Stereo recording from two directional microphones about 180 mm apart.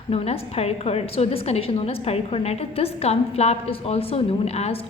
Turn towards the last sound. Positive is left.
turn(degrees=35)  # may be behind; listen again after turning